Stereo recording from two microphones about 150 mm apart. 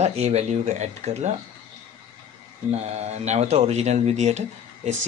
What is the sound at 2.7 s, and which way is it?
Speech, 45° right (ahead or behind).